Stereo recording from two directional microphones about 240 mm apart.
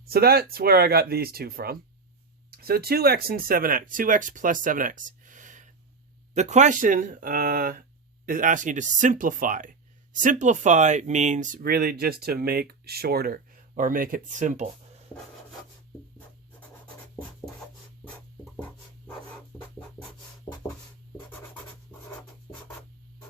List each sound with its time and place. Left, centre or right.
0.0 s speech: right
16.6 s scratch: centre
20.5 s writing: centre